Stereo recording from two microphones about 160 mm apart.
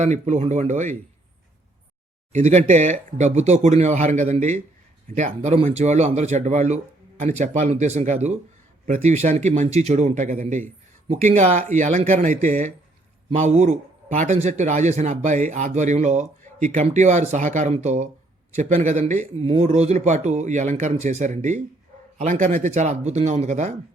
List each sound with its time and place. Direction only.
0.0 s speech: 45° right (ahead or behind)
2.3 s speech: 50° right (ahead or behind)